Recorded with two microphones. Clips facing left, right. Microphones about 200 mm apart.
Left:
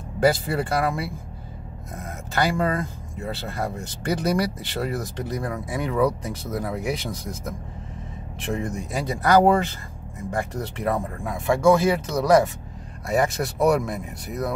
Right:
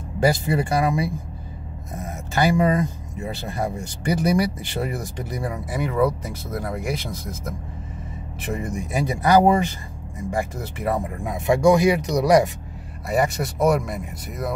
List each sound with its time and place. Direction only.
0.2 s speech: 15° right (ahead or behind)
11.2 s speech: 20° right (ahead or behind)
13.1 s speech: centre (ahead or behind)